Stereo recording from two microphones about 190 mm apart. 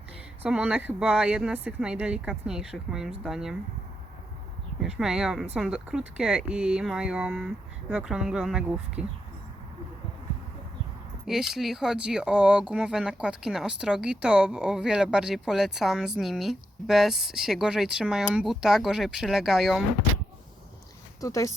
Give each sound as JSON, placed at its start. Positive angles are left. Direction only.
{"t": 0.4, "sound": "speech", "side_deg": -5}
{"t": 4.8, "sound": "speech", "side_deg": -5}
{"t": 11.3, "sound": "speech", "side_deg": -5}
{"t": 21.2, "sound": "speech", "side_deg": 15}